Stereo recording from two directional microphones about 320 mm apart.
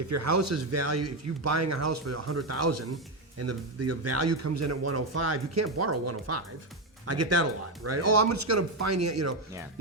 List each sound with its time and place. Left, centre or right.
0.1 s speech: right